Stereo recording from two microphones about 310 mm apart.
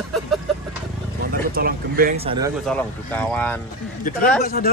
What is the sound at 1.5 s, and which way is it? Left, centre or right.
Speech, right.